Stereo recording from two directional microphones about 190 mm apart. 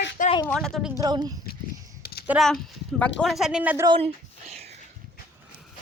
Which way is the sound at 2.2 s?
5° right (ahead or behind).